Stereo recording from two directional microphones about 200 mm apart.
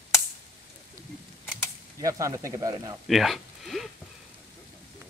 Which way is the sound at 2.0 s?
15° right (ahead or behind).